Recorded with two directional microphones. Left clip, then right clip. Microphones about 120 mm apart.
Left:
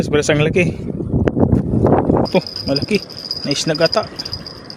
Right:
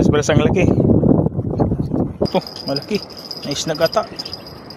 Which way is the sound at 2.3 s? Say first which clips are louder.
Left 3 dB; 60° left (ahead or behind).